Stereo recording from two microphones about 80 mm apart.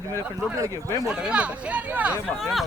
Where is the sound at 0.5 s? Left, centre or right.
Right.